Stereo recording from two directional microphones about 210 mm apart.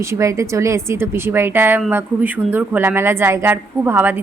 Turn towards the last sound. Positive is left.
turn(degrees=-10)  # may be behind; listen again after turning